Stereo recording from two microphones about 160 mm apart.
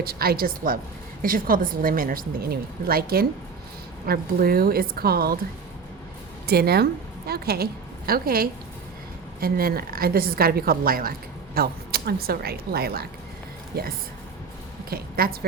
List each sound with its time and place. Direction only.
0.0 s a woman's voice: 70° right (ahead or behind)
6.5 s a woman's voice: 80° right